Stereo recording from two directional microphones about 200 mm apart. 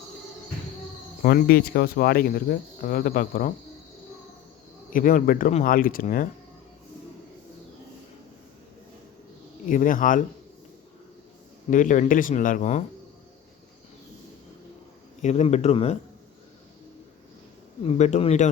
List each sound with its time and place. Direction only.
1.2 s speech: 50° left (ahead or behind)
4.9 s speech: 45° left (ahead or behind)
9.6 s speech: 40° left (ahead or behind)
11.7 s speech: 40° left (ahead or behind)
15.2 s speech: 35° left (ahead or behind)
17.8 s speech: 35° left (ahead or behind)